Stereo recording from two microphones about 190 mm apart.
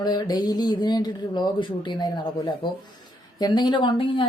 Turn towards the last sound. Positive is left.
turn(degrees=25)  # may be behind; listen again after turning